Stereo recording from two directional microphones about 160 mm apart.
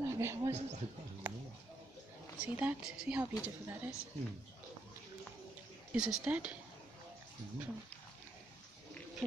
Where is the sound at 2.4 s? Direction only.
10° right (ahead or behind).